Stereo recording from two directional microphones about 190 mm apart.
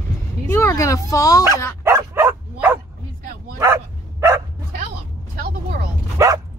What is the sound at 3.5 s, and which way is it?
Bow-wow, 15° right (ahead or behind).